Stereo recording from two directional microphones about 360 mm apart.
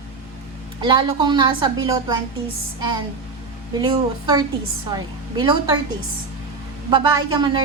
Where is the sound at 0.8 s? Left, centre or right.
Centre.